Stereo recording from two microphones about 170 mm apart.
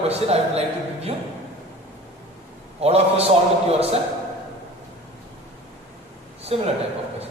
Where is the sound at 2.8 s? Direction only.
35° right (ahead or behind).